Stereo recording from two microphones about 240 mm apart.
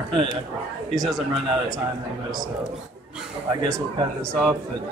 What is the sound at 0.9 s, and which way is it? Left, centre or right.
Speech, centre.